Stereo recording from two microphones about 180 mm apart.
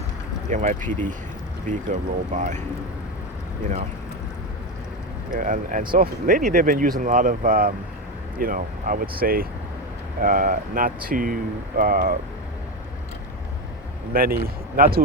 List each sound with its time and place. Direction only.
0.5 s speech: 45° right (ahead or behind)
5.3 s speech: 50° right (ahead or behind)
14.1 s speech: 55° right (ahead or behind)